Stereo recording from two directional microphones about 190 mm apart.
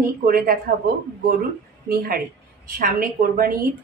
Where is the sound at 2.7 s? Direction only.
50° right (ahead or behind).